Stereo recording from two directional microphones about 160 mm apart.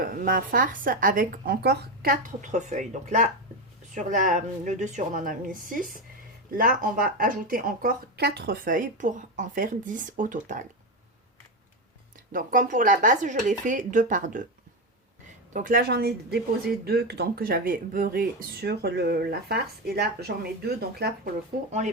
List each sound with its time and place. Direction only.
0.0 s speech: 60° right (ahead or behind)
2.5 s speech: 50° right (ahead or behind)
12.3 s speech: 60° right (ahead or behind)
15.5 s speech: 60° right (ahead or behind); by 21.1 s 80° right
21.7 s speech: 45° right (ahead or behind)